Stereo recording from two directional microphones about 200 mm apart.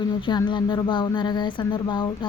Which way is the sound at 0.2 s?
25° left (ahead or behind).